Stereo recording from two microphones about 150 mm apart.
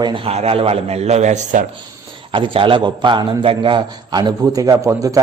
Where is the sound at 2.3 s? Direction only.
35° right (ahead or behind).